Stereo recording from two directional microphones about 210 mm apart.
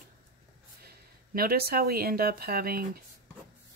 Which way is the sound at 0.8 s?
45° right (ahead or behind).